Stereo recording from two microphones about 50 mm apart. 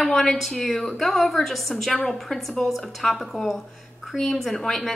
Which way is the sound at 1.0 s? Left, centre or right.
Centre.